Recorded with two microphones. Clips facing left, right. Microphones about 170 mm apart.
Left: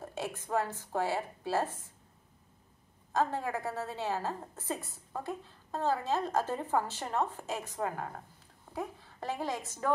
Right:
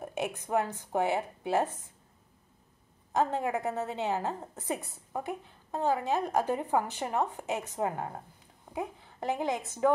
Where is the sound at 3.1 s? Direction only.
20° right (ahead or behind).